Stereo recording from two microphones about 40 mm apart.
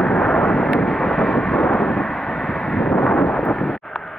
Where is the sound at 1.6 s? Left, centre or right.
Centre.